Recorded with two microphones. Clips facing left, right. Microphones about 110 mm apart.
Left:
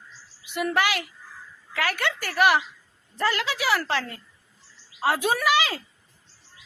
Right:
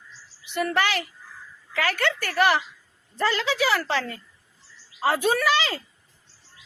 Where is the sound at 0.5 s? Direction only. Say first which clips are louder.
Even; 15° left (ahead or behind).